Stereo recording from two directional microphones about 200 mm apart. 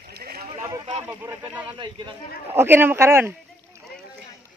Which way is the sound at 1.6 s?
25° right (ahead or behind).